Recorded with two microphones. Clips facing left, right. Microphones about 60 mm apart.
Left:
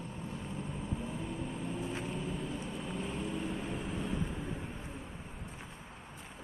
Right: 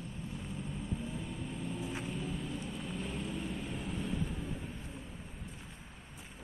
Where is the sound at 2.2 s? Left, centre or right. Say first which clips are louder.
Left 1 dB; left.